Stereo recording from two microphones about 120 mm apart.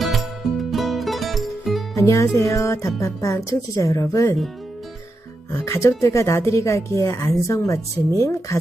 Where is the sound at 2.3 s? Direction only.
25° left (ahead or behind).